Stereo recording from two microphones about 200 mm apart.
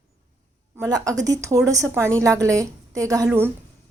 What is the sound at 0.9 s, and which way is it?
A woman's voice, 20° right (ahead or behind).